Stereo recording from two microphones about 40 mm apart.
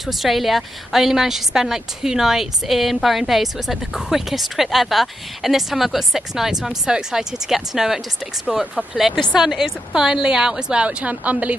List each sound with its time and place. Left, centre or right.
0.0 s a woman's voice: centre
9.1 s a woman's voice: centre; by 11.5 s right